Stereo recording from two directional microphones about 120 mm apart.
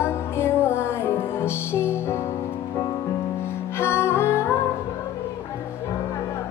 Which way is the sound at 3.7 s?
20° left (ahead or behind).